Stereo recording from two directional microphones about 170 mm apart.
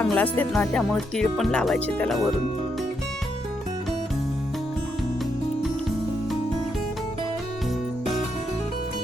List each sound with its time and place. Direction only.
0.0 s speech: 10° left (ahead or behind)